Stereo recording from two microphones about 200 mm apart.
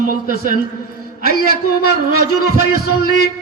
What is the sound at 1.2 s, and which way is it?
A man's voice, 50° left (ahead or behind).